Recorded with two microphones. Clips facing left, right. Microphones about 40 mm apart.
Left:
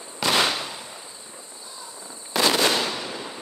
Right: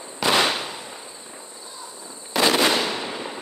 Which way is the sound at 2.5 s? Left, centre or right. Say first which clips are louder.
Right 2 dB; right.